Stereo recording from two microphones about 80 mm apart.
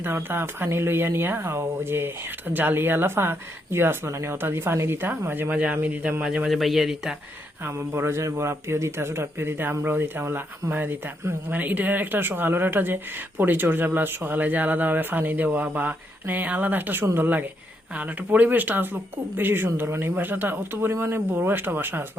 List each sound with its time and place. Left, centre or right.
0.0 s speech: right
6.5 s speech: centre
7.6 s speech: right